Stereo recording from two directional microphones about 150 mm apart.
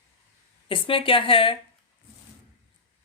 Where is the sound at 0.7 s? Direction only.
35° left (ahead or behind).